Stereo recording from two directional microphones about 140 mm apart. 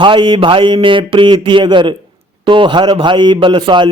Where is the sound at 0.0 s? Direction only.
35° right (ahead or behind).